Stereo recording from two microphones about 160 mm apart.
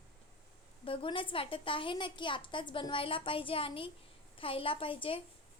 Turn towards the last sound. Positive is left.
turn(degrees=35)  # may be behind; listen again after turning